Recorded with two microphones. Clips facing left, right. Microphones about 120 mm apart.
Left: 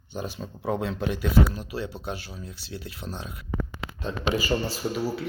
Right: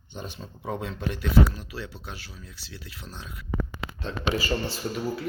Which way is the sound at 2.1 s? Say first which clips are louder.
Left 7 dB; 50° left (ahead or behind).